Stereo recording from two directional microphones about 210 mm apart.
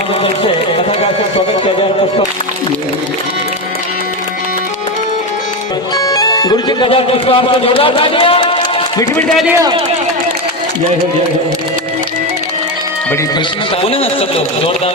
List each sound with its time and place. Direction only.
0.1 s a man's voice: 25° left (ahead or behind)
6.0 s speech: 15° left (ahead or behind)
9.5 s a man's voice: 15° right (ahead or behind)
13.8 s a man's voice: 25° left (ahead or behind)